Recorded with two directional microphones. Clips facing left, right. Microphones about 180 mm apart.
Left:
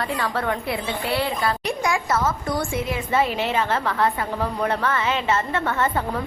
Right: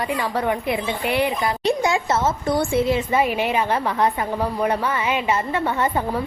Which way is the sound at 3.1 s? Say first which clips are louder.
Right 2 dB; 15° right (ahead or behind).